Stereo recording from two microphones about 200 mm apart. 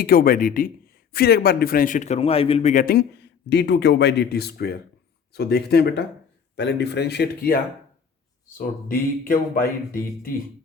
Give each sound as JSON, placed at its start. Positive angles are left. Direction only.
{"t": 0.0, "sound": "speech", "side_deg": 45}
{"t": 2.8, "sound": "speech", "side_deg": 55}